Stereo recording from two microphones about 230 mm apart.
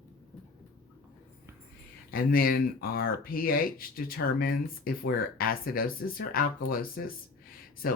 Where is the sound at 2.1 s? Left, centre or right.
Left.